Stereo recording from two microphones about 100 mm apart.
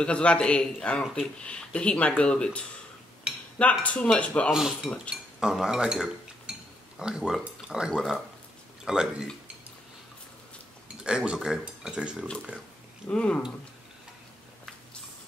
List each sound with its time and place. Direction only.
0.0 s speech: 10° left (ahead or behind)
3.8 s speech: 10° left (ahead or behind)
4.5 s cutlery: 5° right (ahead or behind)
5.1 s speech: 5° right (ahead or behind)
7.9 s cutlery: centre (ahead or behind)
8.8 s speech: 5° right (ahead or behind)
11.1 s speech: 10° right (ahead or behind)
13.1 s speech: 10° left (ahead or behind)